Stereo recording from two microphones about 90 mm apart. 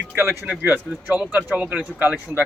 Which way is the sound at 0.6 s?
15° right (ahead or behind).